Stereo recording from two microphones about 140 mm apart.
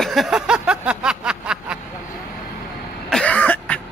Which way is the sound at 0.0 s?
Centre (ahead or behind).